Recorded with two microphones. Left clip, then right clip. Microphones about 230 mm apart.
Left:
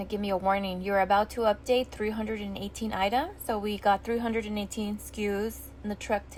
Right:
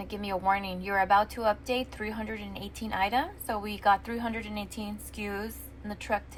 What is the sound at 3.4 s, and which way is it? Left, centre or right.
A woman's voice, left.